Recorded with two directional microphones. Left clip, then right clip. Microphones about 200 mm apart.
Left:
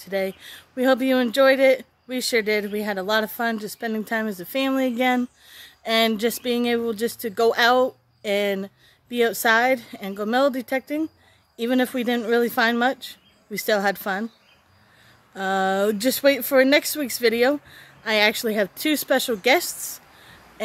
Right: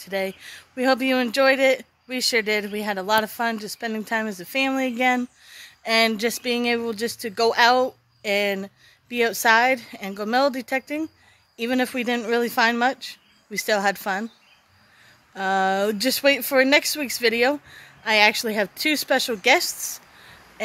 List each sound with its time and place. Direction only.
0.0 s speech: 10° left (ahead or behind)
15.3 s speech: 10° left (ahead or behind)